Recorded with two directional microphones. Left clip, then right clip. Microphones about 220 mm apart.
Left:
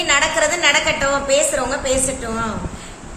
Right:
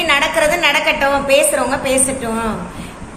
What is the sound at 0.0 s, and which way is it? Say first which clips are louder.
A woman's voice: right 3 dB; 15° left (ahead or behind).